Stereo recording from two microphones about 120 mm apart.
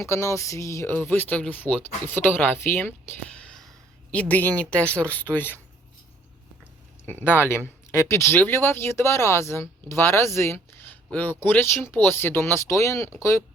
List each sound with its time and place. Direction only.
0.0 s speech: 25° left (ahead or behind)
0.9 s speech: 15° left (ahead or behind)
7.0 s speech: 15° left (ahead or behind)